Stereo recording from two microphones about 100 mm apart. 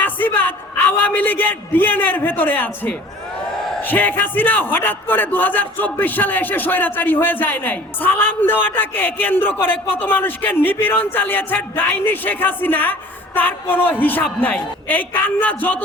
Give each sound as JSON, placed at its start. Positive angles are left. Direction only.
{"t": 0.0, "sound": "a man's voice", "side_deg": 20}